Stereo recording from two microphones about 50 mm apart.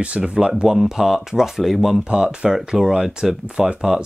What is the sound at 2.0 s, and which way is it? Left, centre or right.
Speech, centre.